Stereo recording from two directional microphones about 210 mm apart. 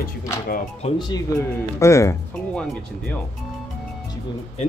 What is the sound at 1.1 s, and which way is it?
Speech, 15° left (ahead or behind).